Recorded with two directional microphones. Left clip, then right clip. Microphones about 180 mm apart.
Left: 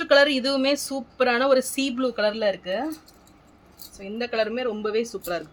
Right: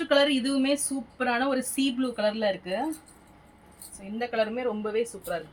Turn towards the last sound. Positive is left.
turn(degrees=65)  # may be behind; listen again after turning